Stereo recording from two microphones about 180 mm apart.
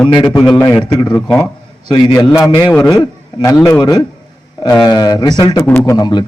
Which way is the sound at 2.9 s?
15° left (ahead or behind).